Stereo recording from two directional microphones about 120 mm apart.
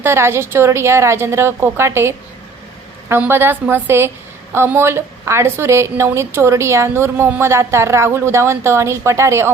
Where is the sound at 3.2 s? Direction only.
15° right (ahead or behind).